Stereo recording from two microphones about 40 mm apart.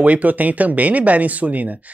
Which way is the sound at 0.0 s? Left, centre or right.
Right.